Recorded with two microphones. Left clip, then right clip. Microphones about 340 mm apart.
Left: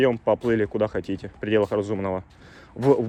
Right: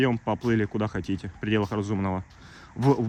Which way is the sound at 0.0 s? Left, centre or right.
Centre.